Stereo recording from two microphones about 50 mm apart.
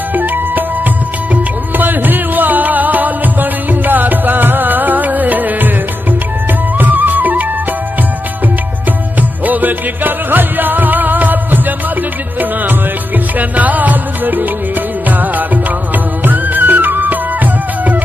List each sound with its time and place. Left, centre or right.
0.1 s music: right
6.8 s music: right
9.5 s music: right
13.4 s music: right